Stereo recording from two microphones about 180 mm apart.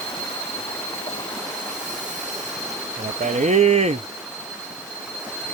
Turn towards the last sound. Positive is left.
turn(degrees=-35)  # may be behind; listen again after turning